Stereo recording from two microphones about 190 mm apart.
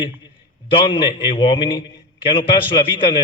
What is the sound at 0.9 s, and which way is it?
A man's voice, 25° left (ahead or behind).